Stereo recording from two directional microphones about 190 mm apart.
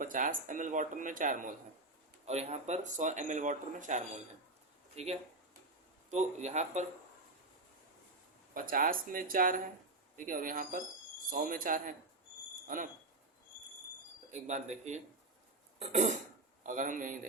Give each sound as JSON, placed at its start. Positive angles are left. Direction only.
{"t": 0.0, "sound": "speech", "side_deg": -45}
{"t": 8.5, "sound": "speech", "side_deg": -45}
{"t": 14.4, "sound": "speech", "side_deg": -40}